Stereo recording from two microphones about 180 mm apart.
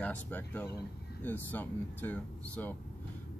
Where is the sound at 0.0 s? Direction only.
10° left (ahead or behind).